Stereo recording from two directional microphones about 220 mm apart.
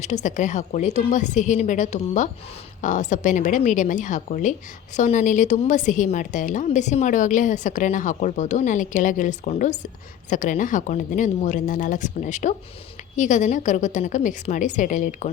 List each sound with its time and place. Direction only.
0.0 s a woman's voice: 30° left (ahead or behind)